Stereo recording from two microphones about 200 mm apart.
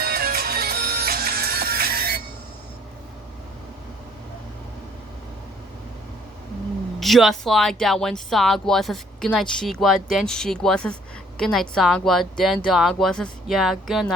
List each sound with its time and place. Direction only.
0.0 s music: 50° right (ahead or behind)
7.0 s speech: centre (ahead or behind)